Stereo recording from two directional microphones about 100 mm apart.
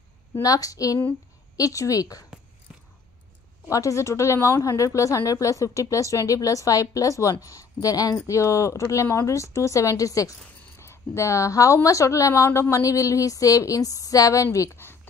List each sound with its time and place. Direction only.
0.4 s a woman's voice: 35° left (ahead or behind)
2.7 s a sound: 10° right (ahead or behind)
3.6 s a woman's voice: 30° left (ahead or behind)